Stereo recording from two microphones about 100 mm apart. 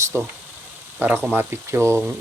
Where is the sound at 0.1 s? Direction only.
25° right (ahead or behind).